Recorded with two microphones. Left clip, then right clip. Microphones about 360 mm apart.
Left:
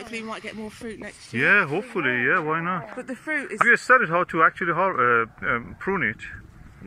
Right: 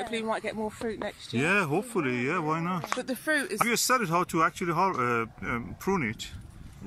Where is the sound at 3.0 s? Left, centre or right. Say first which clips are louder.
Even; right.